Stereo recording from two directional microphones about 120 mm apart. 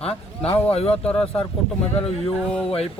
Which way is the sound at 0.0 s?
55° left (ahead or behind).